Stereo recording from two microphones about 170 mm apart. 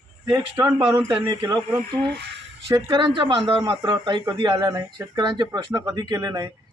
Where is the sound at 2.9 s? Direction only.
30° right (ahead or behind).